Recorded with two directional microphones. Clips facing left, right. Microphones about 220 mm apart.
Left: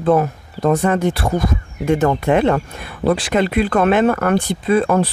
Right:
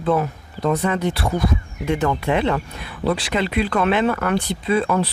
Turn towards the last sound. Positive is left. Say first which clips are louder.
# left 4 dB
turn(degrees=50)  # may be behind; listen again after turning